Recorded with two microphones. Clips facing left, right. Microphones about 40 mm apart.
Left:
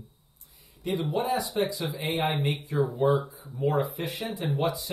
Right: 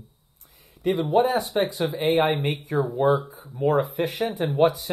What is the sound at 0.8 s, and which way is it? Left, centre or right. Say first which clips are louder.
Speech: right 8 dB; right.